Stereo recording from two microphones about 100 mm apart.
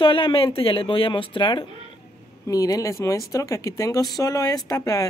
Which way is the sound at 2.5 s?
35° left (ahead or behind).